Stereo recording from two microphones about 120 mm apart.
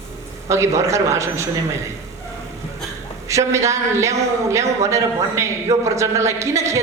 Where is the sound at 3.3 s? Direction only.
25° right (ahead or behind).